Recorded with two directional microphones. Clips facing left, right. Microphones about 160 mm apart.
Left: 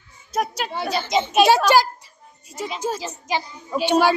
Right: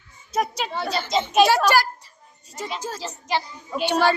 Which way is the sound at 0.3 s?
Centre (ahead or behind).